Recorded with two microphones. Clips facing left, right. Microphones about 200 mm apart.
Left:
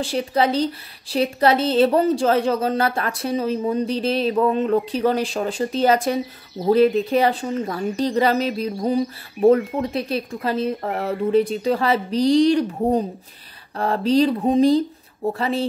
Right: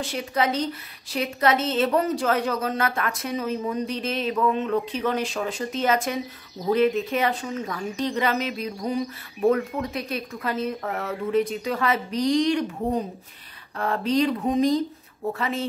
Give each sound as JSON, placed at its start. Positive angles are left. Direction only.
{"t": 0.0, "sound": "a woman's voice", "side_deg": 30}